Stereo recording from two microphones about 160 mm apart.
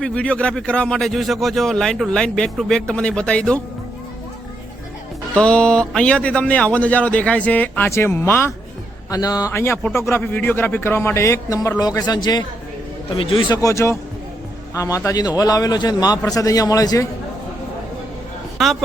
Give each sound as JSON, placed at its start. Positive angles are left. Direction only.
{"t": 0.0, "sound": "speech", "side_deg": 5}
{"t": 5.3, "sound": "a man's voice", "side_deg": 5}
{"t": 13.6, "sound": "a man's voice", "side_deg": 20}
{"t": 18.5, "sound": "speech", "side_deg": 0}